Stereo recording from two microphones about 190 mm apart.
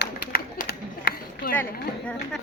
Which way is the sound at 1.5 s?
5° left (ahead or behind).